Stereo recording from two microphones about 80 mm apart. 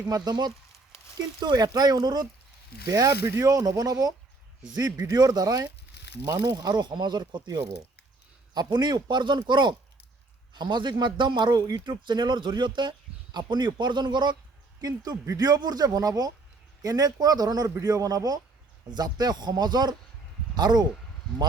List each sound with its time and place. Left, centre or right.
0.1 s speech: right
2.8 s speech: right
3.5 s speech: right
14.8 s speech: right